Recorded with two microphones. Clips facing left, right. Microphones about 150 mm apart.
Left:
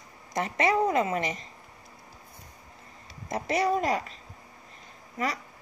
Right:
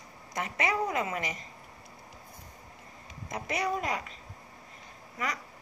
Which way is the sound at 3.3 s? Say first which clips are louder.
Left 6 dB; 35° left (ahead or behind).